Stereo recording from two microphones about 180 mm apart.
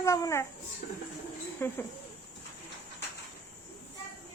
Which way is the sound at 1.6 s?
10° left (ahead or behind).